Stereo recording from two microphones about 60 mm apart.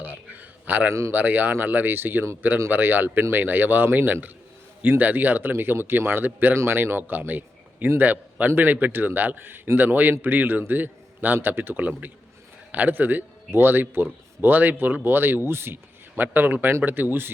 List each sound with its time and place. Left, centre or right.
0.0 s a sound: right
0.9 s speech: right
1.1 s a man's voice: right